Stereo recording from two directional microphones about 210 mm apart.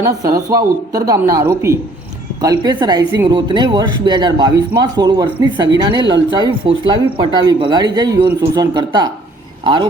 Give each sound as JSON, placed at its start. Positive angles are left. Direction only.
{"t": 0.0, "sound": "speech", "side_deg": -15}